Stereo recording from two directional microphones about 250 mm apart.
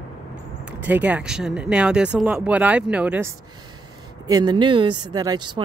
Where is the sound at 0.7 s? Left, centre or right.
Centre.